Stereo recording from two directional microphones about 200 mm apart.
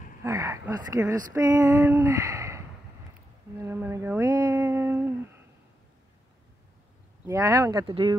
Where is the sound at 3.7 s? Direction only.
10° right (ahead or behind).